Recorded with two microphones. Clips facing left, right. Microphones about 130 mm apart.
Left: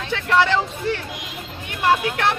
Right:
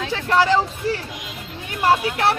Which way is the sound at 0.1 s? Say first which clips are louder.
Even; 35° right (ahead or behind).